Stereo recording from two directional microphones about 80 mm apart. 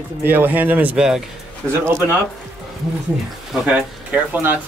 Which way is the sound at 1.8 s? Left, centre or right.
Right.